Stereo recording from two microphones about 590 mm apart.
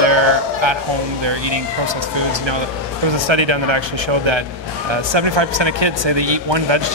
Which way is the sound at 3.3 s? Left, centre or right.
Right.